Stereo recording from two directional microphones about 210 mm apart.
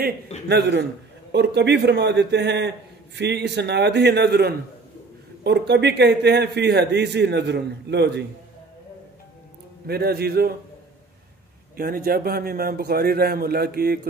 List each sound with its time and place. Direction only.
0.5 s a man's voice: 55° right (ahead or behind)
9.8 s a man's voice: 50° right (ahead or behind)
11.7 s a man's voice: 45° right (ahead or behind)